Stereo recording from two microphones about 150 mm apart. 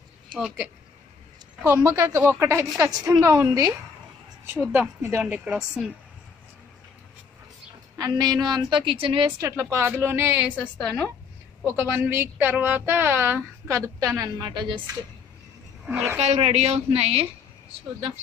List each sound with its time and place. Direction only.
1.6 s speech: 20° right (ahead or behind)
4.7 s a woman's voice: 15° right (ahead or behind)
8.0 s a woman's voice: 25° right (ahead or behind)
9.4 s a woman's voice: 20° right (ahead or behind)
10.5 s a woman's voice: 10° left (ahead or behind)
11.6 s a woman's voice: 15° right (ahead or behind)
15.8 s speech: 5° right (ahead or behind)
16.2 s a woman's voice: 45° right (ahead or behind)